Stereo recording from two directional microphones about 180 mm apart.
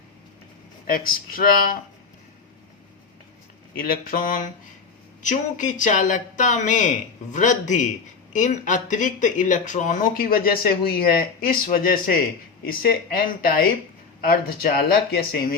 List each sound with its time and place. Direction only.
0.9 s speech: 55° left (ahead or behind)
3.8 s speech: 55° left (ahead or behind)